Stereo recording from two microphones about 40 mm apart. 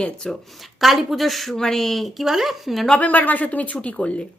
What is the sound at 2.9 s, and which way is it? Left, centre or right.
Speech, left.